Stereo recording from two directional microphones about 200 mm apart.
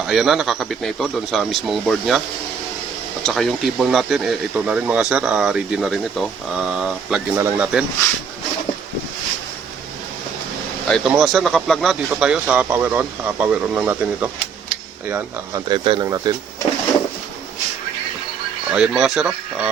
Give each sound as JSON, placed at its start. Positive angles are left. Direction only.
{"t": 0.1, "sound": "speech", "side_deg": 0}
{"t": 3.2, "sound": "speech", "side_deg": 0}
{"t": 10.8, "sound": "speech", "side_deg": 0}
{"t": 15.7, "sound": "speech", "side_deg": -25}
{"t": 18.7, "sound": "speech", "side_deg": -5}